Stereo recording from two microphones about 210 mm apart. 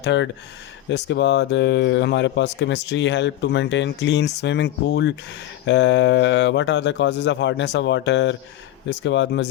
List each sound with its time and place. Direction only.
0.0 s speech: 55° left (ahead or behind)